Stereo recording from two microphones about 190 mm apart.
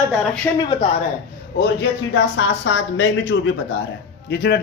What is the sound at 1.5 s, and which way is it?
Speech, 65° left (ahead or behind).